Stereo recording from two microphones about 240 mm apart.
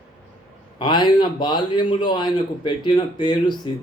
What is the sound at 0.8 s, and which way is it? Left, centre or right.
A man's voice, centre.